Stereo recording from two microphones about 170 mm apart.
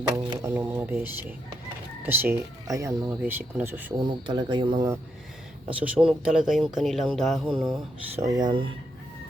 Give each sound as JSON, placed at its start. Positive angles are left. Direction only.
{"t": 0.4, "sound": "speech", "side_deg": -15}
{"t": 3.9, "sound": "speech", "side_deg": -25}
{"t": 5.6, "sound": "speech", "side_deg": -5}
{"t": 8.1, "sound": "speech", "side_deg": -20}